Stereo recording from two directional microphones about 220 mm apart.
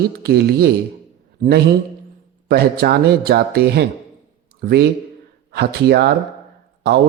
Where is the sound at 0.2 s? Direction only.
45° right (ahead or behind).